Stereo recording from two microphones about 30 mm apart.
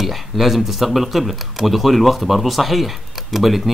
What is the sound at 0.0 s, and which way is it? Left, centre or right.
Speech, centre.